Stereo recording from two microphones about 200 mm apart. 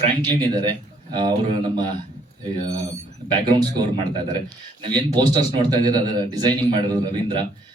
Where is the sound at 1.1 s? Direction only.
20° right (ahead or behind).